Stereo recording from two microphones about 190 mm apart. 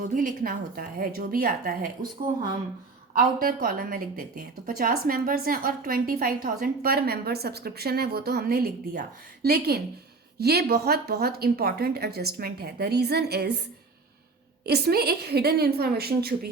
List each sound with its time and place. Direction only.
0.1 s a woman's voice: 45° right (ahead or behind)
3.2 s a woman's voice: 50° right (ahead or behind)
14.6 s speech: 55° right (ahead or behind)